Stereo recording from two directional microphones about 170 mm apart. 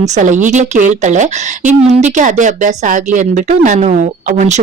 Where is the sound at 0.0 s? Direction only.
45° right (ahead or behind).